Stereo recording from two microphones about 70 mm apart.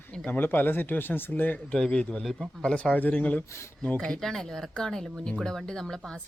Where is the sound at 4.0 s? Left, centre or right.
Centre.